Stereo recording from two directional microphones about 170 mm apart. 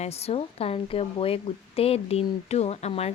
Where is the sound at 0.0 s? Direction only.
40° left (ahead or behind).